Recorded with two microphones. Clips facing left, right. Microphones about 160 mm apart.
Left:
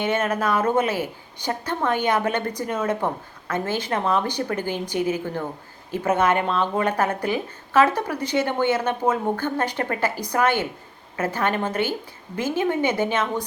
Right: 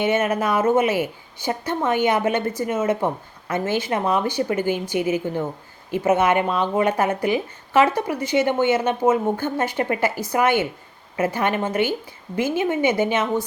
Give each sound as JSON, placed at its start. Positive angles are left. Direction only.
{"t": 0.0, "sound": "speech", "side_deg": -10}